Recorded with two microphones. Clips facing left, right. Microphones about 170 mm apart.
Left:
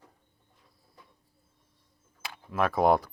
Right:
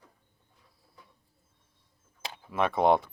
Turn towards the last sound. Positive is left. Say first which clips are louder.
# even
turn(degrees=0)  # may be behind; listen again after turning